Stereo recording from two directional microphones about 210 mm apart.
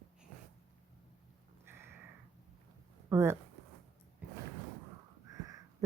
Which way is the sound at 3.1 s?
10° right (ahead or behind).